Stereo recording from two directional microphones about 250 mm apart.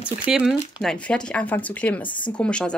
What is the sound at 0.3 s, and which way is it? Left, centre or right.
A woman's voice, centre.